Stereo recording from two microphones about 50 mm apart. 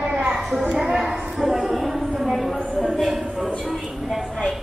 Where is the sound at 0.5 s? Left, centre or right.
Centre.